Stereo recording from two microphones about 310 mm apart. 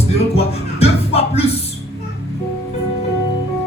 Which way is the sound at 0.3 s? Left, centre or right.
Centre.